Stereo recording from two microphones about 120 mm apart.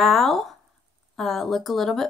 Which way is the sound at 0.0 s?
Centre (ahead or behind).